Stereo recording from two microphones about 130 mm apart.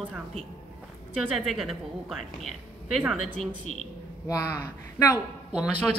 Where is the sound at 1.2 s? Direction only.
Centre (ahead or behind).